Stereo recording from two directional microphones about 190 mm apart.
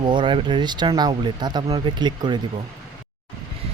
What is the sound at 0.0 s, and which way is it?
Speech, 25° right (ahead or behind).